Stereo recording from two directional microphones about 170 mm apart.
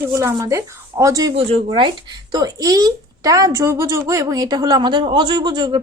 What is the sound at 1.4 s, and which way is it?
A woman's voice, 35° right (ahead or behind).